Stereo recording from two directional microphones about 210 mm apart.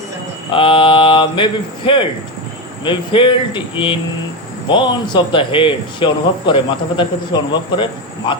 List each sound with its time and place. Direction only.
0.5 s a man's voice: 25° left (ahead or behind)